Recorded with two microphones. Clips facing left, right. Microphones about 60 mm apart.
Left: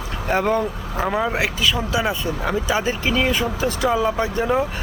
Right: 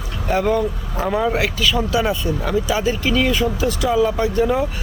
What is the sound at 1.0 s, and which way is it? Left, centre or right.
Speech, centre.